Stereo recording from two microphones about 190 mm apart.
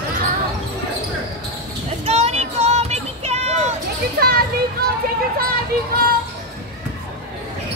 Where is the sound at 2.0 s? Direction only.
35° right (ahead or behind).